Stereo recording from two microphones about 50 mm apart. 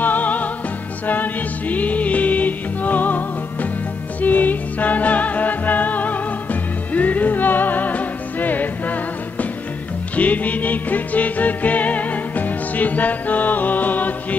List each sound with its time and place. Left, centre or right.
0.0 s music: left
10.1 s music: left